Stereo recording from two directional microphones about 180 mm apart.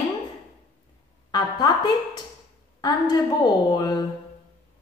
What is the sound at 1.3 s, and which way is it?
A woman's voice, 20° left (ahead or behind).